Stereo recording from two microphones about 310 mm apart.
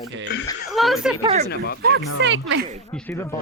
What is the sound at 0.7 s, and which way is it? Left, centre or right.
Speech, centre.